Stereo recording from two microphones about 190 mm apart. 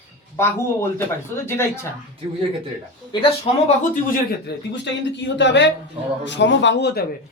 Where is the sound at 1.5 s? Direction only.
15° left (ahead or behind).